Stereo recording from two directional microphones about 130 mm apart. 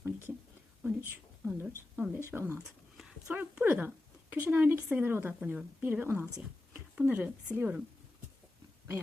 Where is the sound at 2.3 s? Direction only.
20° right (ahead or behind).